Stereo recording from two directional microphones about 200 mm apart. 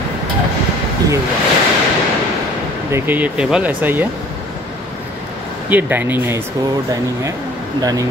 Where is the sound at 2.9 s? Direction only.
10° right (ahead or behind).